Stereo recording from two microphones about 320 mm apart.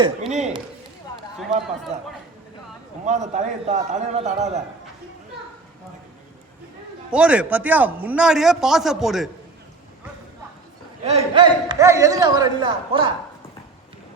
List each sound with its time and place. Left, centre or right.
0.0 s a man's voice: right
3.1 s a man's voice: right
7.1 s speech: centre
11.0 s a man's voice: centre